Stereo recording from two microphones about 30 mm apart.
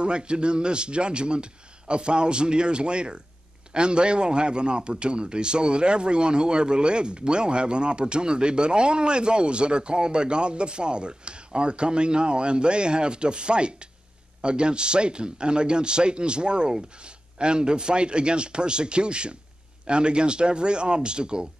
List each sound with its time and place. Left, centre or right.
0.0 s a man's voice: right